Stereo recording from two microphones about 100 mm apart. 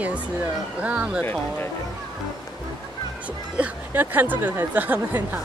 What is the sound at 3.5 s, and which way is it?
Speech, 15° right (ahead or behind).